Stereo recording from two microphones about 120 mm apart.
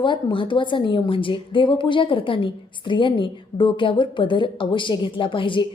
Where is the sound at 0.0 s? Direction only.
40° left (ahead or behind).